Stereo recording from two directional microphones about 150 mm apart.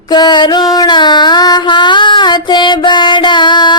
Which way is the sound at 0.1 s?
30° left (ahead or behind).